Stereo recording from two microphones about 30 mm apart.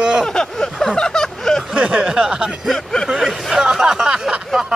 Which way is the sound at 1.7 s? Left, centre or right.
Right.